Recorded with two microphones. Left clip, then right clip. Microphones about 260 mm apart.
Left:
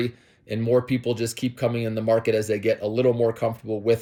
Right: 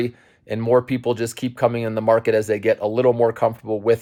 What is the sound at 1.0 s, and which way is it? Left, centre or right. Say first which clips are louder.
Speech: right 3 dB; centre.